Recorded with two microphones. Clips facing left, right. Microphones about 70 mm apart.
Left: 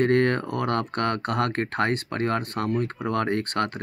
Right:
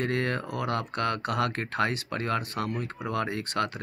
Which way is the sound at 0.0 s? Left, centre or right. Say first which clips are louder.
Left 8 dB; left.